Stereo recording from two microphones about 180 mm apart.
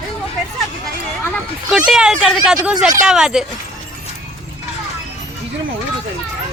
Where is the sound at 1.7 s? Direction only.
5° right (ahead or behind).